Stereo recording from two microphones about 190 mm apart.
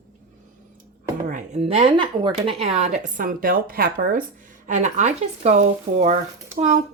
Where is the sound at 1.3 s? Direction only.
40° right (ahead or behind).